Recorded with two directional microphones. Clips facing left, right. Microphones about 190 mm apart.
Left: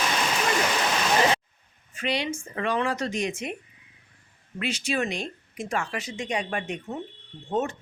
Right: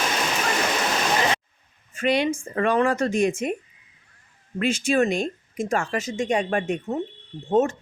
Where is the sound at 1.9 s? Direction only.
50° right (ahead or behind).